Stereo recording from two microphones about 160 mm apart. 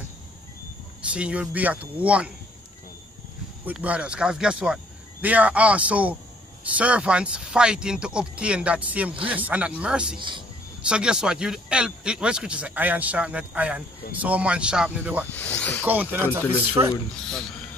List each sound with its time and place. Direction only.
1.1 s speech: 5° right (ahead or behind)
3.6 s speech: 10° right (ahead or behind)
10.1 s speech: 30° right (ahead or behind)
10.8 s speech: 5° right (ahead or behind)
15.2 s speech: 10° left (ahead or behind)
15.8 s speech: 10° right (ahead or behind)
16.3 s speech: 10° left (ahead or behind)